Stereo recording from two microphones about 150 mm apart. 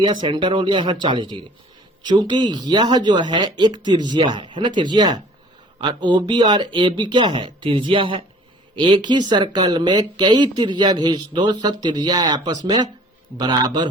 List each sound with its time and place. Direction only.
0.0 s speech: 30° right (ahead or behind)